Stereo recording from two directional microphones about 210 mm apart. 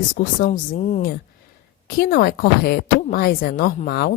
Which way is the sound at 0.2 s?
40° left (ahead or behind).